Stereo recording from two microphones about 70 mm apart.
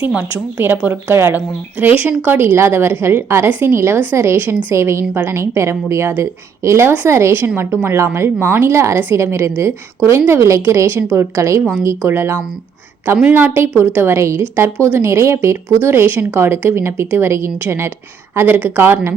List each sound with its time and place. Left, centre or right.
0.1 s a woman's voice: right
3.8 s a woman's voice: right
14.2 s a woman's voice: right